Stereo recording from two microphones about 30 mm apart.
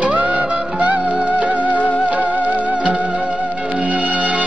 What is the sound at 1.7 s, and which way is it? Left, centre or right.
Music, left.